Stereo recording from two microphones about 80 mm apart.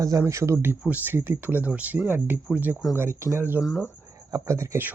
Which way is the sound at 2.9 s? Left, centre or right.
Right.